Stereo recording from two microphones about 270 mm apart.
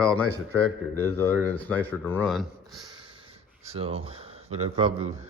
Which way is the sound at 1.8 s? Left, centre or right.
Centre.